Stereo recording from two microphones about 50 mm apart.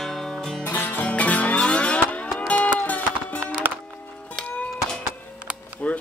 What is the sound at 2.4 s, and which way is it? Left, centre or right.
Music, left.